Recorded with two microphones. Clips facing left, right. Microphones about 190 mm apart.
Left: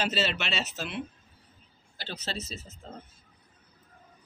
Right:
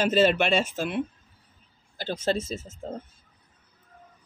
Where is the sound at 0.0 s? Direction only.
50° right (ahead or behind).